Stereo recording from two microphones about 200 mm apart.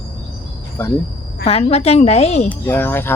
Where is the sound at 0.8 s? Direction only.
10° left (ahead or behind).